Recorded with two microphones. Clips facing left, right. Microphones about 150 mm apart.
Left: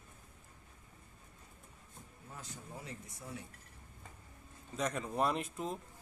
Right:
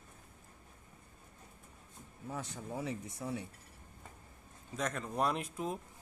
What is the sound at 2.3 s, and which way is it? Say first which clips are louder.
Speech: right 8 dB; 85° right.